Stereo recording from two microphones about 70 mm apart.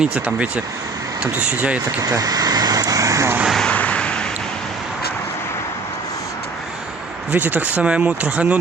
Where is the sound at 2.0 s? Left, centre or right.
Right.